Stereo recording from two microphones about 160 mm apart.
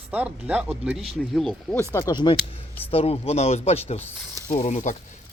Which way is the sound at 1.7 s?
15° left (ahead or behind).